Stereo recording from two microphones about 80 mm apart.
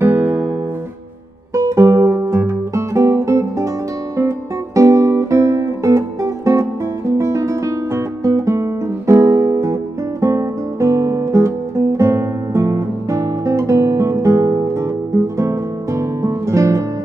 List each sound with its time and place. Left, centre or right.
0.0 s guitar: right
1.5 s music: right
4.7 s music: right
10.2 s guitar: right
15.1 s music: right